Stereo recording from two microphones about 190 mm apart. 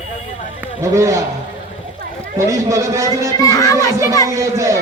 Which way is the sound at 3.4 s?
15° left (ahead or behind).